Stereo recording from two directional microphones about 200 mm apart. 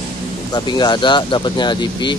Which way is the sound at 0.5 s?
20° left (ahead or behind).